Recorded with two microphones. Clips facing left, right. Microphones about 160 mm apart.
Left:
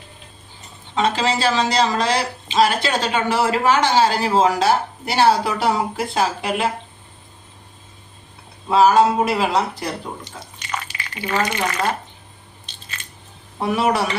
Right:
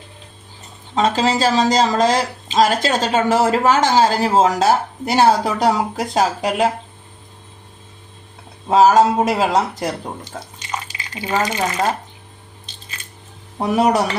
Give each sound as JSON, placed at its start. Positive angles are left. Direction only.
{"t": 0.9, "sound": "speech", "side_deg": -40}
{"t": 8.7, "sound": "speech", "side_deg": -45}
{"t": 10.7, "sound": "drip", "side_deg": -20}
{"t": 11.4, "sound": "speech", "side_deg": -25}
{"t": 13.6, "sound": "speech", "side_deg": -40}